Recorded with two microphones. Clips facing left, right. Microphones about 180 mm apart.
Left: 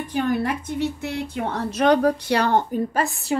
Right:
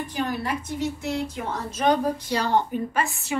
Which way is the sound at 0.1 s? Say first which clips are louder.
Left 7 dB; 55° left (ahead or behind).